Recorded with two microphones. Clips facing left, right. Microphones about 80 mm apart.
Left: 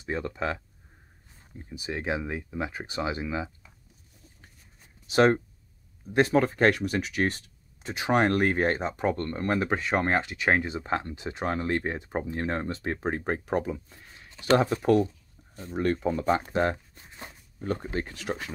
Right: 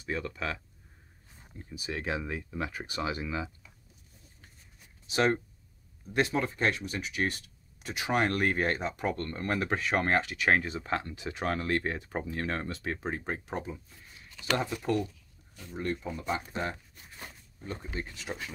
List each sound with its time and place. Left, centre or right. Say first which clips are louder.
0.0 s speech: left 4 dB; left
1.6 s speech: left 3 dB; left
5.1 s speech: left 6 dB; left
6.3 s speech: left 7 dB; left
7.2 s speech: left 4 dB; left
9.2 s speech: left 4 dB; left
13.0 s speech: left 6 dB; left
15.0 s a sound: left 7 dB; left
15.7 s speech: left 8 dB; left
16.7 s a sound: left 3 dB; left
17.6 s speech: left 8 dB; left